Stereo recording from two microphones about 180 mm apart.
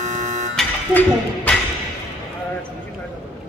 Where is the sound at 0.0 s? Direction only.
40° right (ahead or behind).